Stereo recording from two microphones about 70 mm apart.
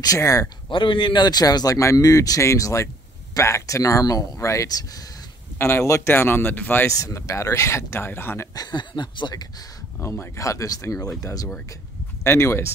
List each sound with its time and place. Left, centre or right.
0.0 s speech: left
1.0 s speech: left
1.8 s speech: left
5.6 s speech: left
6.1 s speech: left
6.9 s speech: left
8.5 s speech: left
9.9 s speech: left
12.2 s speech: left